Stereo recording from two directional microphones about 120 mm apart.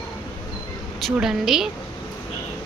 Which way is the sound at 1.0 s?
5° right (ahead or behind).